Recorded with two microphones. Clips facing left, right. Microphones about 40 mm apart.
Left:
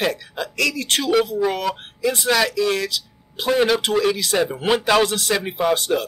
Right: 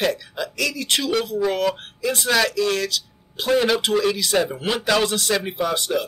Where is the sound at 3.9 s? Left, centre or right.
Centre.